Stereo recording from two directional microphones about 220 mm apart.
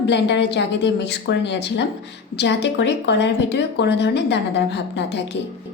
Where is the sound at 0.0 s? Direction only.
55° left (ahead or behind).